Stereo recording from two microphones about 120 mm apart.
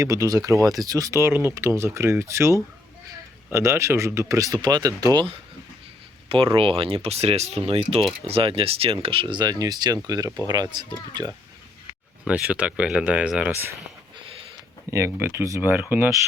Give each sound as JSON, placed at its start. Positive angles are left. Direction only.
{"t": 0.0, "sound": "speech", "side_deg": -30}
{"t": 6.2, "sound": "speech", "side_deg": -45}
{"t": 9.2, "sound": "speech", "side_deg": -35}
{"t": 12.2, "sound": "speech", "side_deg": -10}
{"t": 14.8, "sound": "speech", "side_deg": -25}